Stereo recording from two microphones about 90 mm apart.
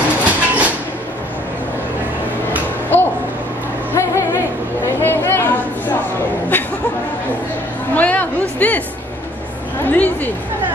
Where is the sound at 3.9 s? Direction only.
30° left (ahead or behind).